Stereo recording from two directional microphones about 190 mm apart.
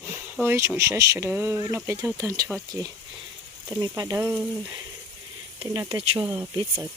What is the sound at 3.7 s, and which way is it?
Speech, 20° right (ahead or behind).